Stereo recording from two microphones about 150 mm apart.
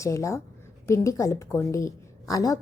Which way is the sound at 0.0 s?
20° left (ahead or behind).